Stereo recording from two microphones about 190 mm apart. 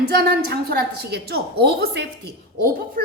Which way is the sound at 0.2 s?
55° right (ahead or behind).